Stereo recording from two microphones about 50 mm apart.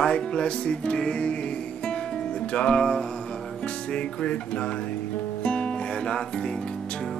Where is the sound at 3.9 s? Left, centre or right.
Left.